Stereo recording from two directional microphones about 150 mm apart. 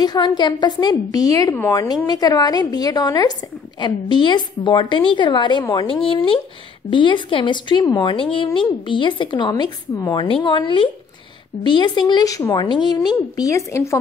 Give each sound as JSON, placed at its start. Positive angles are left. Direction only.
{"t": 0.0, "sound": "a woman's voice", "side_deg": 25}